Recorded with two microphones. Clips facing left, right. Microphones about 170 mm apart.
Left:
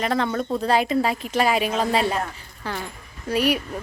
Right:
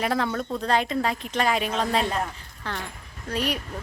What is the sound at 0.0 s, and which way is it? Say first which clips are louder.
Speech: left 2 dB; 5° right (ahead or behind).